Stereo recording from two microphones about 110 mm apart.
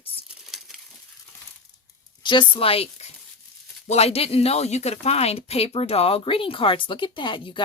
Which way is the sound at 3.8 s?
75° left (ahead or behind).